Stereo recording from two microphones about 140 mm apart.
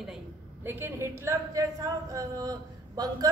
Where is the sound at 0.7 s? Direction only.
15° right (ahead or behind).